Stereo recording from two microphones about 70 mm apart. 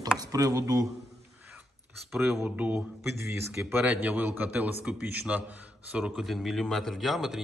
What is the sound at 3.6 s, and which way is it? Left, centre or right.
A man's voice, right.